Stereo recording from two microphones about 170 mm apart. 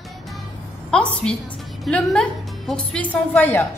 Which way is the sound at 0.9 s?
5° left (ahead or behind).